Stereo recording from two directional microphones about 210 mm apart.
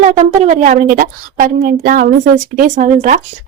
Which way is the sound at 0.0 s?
35° right (ahead or behind).